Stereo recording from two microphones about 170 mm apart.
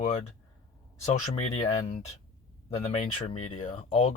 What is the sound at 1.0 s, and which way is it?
Speech, 40° left (ahead or behind).